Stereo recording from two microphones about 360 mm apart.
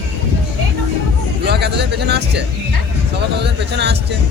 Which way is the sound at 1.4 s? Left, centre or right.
Right.